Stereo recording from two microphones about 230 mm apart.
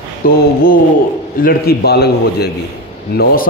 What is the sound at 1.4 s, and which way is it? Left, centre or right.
A man's voice, left.